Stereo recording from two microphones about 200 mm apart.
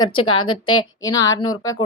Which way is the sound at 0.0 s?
25° left (ahead or behind).